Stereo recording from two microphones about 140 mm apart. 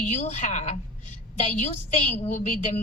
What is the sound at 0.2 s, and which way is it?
Speech, 60° left (ahead or behind).